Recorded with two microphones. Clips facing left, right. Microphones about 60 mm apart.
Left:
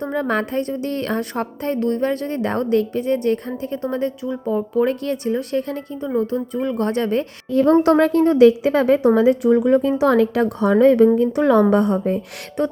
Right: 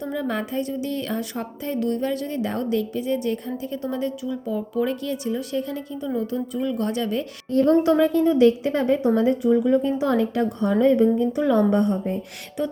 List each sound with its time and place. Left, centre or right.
0.0 s speech: left
7.9 s speech: left
11.2 s a woman's voice: left
11.7 s speech: left
12.6 s speech: left